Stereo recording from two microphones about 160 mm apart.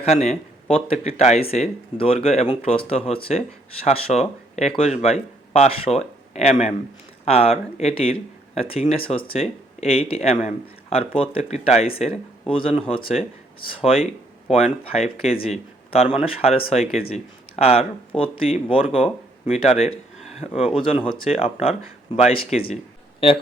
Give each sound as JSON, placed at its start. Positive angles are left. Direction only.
{"t": 0.0, "sound": "speech", "side_deg": 40}